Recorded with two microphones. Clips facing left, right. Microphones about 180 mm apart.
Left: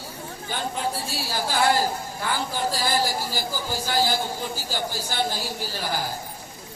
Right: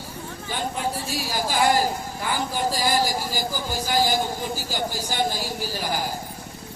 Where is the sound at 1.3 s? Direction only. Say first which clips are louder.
Right 1 dB; 15° right (ahead or behind).